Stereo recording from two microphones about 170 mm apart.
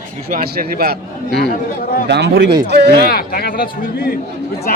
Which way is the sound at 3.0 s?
65° left (ahead or behind).